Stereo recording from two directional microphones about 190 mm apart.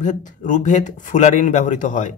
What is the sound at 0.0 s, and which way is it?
Speech, 40° left (ahead or behind).